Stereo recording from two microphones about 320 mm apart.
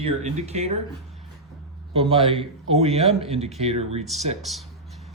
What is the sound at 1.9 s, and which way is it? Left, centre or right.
A man's voice, centre.